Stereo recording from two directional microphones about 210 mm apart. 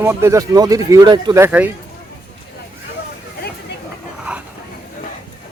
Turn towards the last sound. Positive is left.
turn(degrees=-5)  # may be behind; listen again after turning